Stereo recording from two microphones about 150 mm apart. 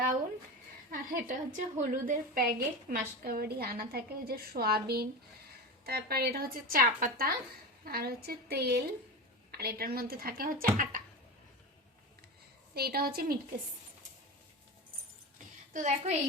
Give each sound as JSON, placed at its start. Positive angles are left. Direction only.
{"t": 0.9, "sound": "a woman's voice", "side_deg": -65}
{"t": 3.2, "sound": "a woman's voice", "side_deg": -85}
{"t": 7.9, "sound": "a woman's voice", "side_deg": -90}
{"t": 12.7, "sound": "a woman's voice", "side_deg": -90}
{"t": 15.7, "sound": "a woman's voice", "side_deg": -55}